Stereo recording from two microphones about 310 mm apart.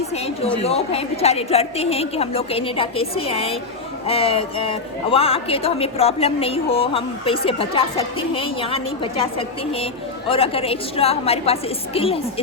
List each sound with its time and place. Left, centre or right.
0.6 s a woman's voice: centre